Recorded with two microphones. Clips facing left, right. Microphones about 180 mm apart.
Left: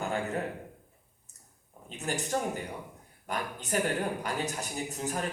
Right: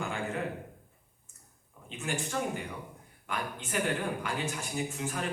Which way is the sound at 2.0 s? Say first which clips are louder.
Left 1 dB; 40° left (ahead or behind).